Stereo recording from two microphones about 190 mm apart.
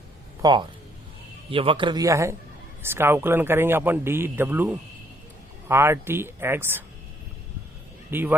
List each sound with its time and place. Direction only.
0.4 s a man's voice: 25° right (ahead or behind)
8.1 s a man's voice: 10° right (ahead or behind)